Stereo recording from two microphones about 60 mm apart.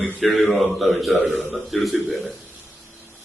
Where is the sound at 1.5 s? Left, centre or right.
Centre.